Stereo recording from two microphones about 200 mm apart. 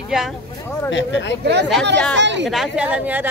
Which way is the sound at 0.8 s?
65° left (ahead or behind).